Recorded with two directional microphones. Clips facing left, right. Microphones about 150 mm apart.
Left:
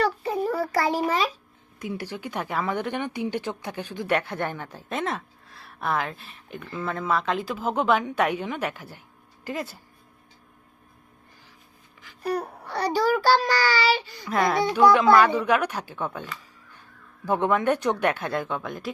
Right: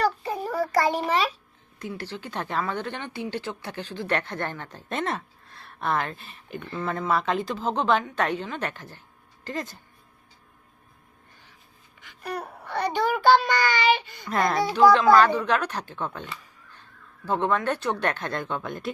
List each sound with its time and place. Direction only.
0.5 s a sound: 30° left (ahead or behind)
1.8 s a woman's voice: 15° left (ahead or behind)
12.0 s a child's voice: 35° left (ahead or behind)
14.3 s a child's voice: centre (ahead or behind)
15.1 s speech: 10° left (ahead or behind)
17.2 s speech: 15° left (ahead or behind)